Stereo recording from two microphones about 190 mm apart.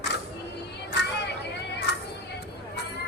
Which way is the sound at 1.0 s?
60° left (ahead or behind).